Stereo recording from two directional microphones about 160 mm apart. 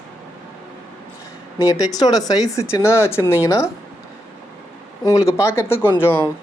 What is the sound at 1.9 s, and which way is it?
Speech, 25° left (ahead or behind).